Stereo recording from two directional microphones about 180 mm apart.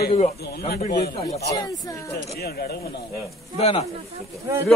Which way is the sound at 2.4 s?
60° left (ahead or behind).